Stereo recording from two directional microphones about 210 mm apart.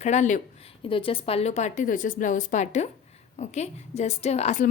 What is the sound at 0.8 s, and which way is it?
A woman's voice, 25° left (ahead or behind).